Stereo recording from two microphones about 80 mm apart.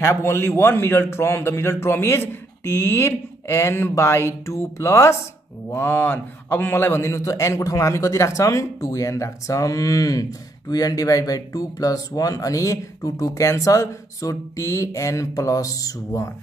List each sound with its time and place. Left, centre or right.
0.0 s a man's voice: left